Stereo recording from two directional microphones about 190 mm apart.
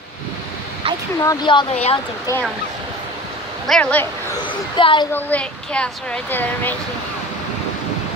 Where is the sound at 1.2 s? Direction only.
20° left (ahead or behind).